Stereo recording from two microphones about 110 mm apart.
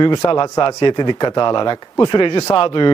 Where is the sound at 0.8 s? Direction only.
45° left (ahead or behind).